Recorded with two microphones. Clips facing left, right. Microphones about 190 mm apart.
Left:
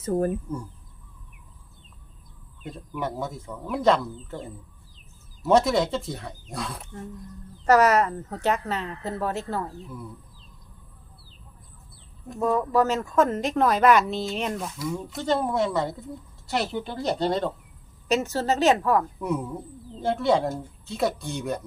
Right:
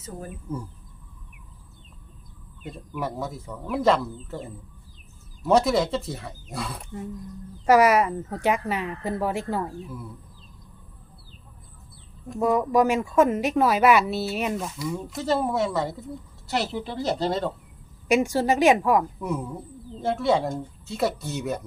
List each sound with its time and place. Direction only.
0.0 s speech: 55° left (ahead or behind)
2.6 s speech: centre (ahead or behind)
5.5 s a woman's voice: centre (ahead or behind)
12.4 s a woman's voice: 10° right (ahead or behind)
18.1 s a woman's voice: 10° right (ahead or behind)
19.2 s speech: centre (ahead or behind)